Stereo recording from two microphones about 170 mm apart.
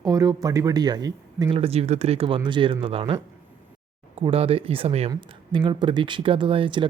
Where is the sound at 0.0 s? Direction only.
20° right (ahead or behind).